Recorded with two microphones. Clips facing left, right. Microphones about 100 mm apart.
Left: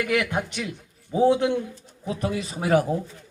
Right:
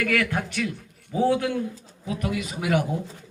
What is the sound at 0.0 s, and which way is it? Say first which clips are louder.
A man's voice: even; 20° left (ahead or behind).